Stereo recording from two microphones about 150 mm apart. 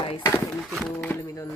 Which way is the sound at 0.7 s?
5° left (ahead or behind).